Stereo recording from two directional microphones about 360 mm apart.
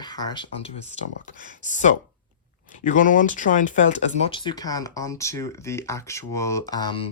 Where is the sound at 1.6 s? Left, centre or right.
Centre.